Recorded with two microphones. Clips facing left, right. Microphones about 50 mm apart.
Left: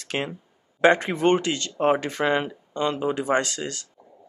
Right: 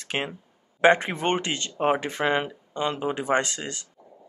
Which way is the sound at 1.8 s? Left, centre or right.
Centre.